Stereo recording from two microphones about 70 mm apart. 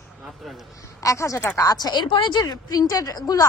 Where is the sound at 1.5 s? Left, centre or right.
Left.